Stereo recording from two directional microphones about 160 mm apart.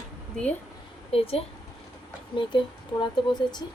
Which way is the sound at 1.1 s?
35° left (ahead or behind).